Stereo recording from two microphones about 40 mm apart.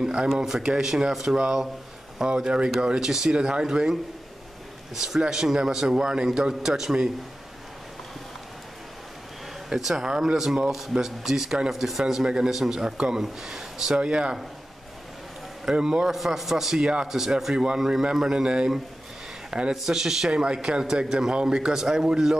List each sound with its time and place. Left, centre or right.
0.0 s speech: right
0.3 s speech: centre
4.9 s speech: centre
9.7 s speech: centre
13.9 s speech: right
15.6 s speech: centre
16.1 s speech: centre
19.7 s speech: centre